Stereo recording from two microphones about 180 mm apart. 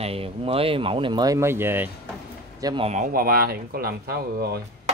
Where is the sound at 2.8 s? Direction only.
45° right (ahead or behind).